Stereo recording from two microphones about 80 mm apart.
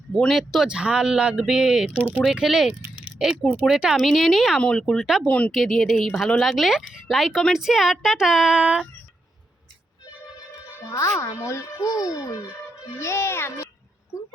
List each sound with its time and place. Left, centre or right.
0.1 s speech: centre
2.9 s a sound: centre
3.7 s speech: centre
10.8 s a child's voice: left
13.0 s speech: left